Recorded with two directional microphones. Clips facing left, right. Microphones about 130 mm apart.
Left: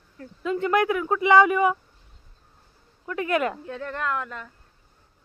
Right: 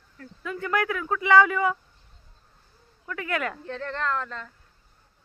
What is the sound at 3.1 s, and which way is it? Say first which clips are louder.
Speech: left 5 dB; 20° left (ahead or behind).